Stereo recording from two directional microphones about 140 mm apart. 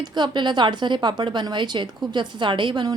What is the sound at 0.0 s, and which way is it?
A woman's voice, 30° right (ahead or behind).